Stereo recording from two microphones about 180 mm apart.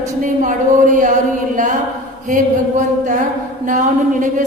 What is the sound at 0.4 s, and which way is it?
A woman's voice, 45° right (ahead or behind).